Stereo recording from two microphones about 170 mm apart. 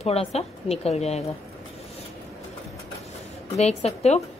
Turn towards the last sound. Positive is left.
turn(degrees=40)  # may be behind; listen again after turning